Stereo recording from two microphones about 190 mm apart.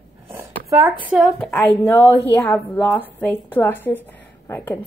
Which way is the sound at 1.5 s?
10° left (ahead or behind).